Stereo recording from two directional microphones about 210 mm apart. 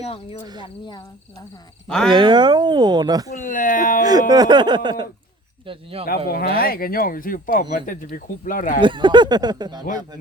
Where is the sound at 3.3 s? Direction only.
40° left (ahead or behind).